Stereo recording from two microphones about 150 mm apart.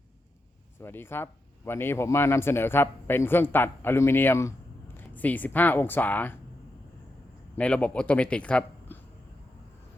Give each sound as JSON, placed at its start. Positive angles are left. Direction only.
{"t": 0.8, "sound": "speech", "side_deg": 15}
{"t": 7.5, "sound": "speech", "side_deg": 10}